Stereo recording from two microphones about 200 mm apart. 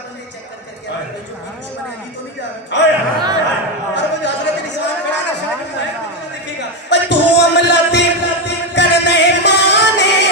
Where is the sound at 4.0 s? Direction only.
60° left (ahead or behind).